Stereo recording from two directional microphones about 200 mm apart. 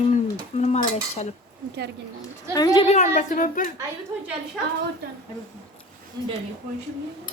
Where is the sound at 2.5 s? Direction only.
20° left (ahead or behind).